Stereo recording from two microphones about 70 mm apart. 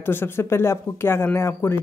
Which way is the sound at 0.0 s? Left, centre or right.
Left.